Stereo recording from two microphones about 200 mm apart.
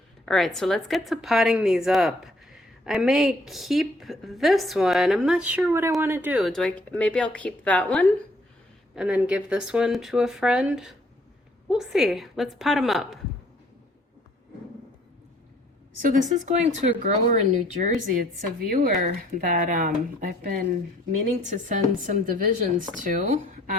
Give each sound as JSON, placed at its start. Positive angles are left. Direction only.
{"t": 0.3, "sound": "a woman's voice", "side_deg": 0}
{"t": 9.0, "sound": "a woman's voice", "side_deg": -5}
{"t": 16.0, "sound": "speech", "side_deg": -40}